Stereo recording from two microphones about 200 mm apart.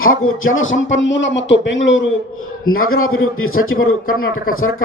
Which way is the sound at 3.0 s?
90° left.